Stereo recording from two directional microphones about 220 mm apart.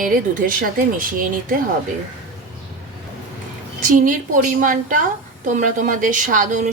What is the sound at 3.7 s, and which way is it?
A woman's voice, 35° right (ahead or behind).